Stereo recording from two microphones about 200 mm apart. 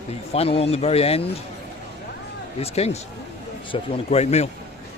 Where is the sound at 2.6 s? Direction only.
30° left (ahead or behind).